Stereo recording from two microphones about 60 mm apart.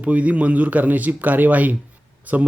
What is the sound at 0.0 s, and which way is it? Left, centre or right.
Speech, right.